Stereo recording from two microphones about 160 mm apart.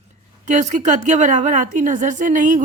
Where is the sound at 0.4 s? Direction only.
50° right (ahead or behind).